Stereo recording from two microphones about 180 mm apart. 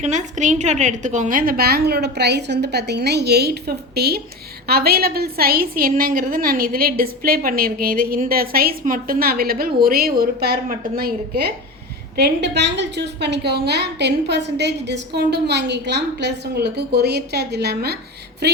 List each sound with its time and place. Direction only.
0.0 s a woman's voice: 45° right (ahead or behind)
12.1 s a woman's voice: 70° right (ahead or behind)